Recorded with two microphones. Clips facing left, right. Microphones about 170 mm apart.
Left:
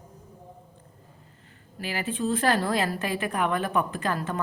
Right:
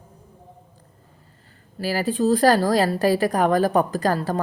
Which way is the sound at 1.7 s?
35° right (ahead or behind).